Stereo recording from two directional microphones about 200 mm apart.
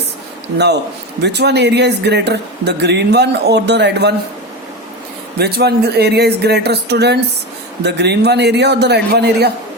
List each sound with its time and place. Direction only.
1.2 s speech: 55° right (ahead or behind)
5.4 s speech: 55° right (ahead or behind)